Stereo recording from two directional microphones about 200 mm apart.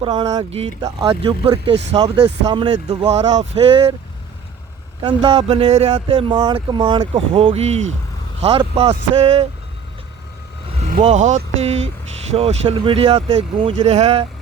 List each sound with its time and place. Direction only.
0.0 s speech: 20° right (ahead or behind)
0.5 s speech: 30° right (ahead or behind)
5.0 s speech: 25° right (ahead or behind)
10.8 s speech: 35° right (ahead or behind)